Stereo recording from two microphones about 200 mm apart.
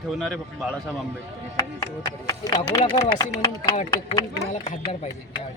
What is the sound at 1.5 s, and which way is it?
Speech, 15° left (ahead or behind).